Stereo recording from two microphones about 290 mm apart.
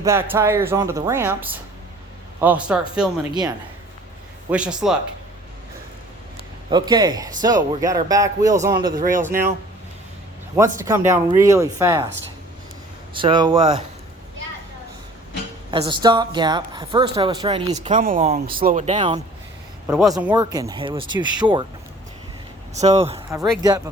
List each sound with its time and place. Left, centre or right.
0.0 s a man's voice: centre
4.4 s a man's voice: centre
6.7 s speech: centre
10.8 s speech: centre
13.1 s speech: centre
15.7 s speech: centre
22.8 s speech: right